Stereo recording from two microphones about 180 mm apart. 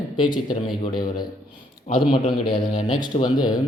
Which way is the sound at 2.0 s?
30° left (ahead or behind).